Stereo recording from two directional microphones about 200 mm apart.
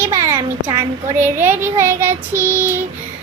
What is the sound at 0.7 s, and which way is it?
Child singing, 10° right (ahead or behind).